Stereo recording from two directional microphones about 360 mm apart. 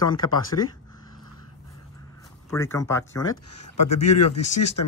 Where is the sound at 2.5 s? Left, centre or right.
Centre.